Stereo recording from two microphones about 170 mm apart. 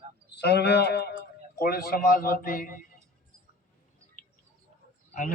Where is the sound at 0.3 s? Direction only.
75° left (ahead or behind).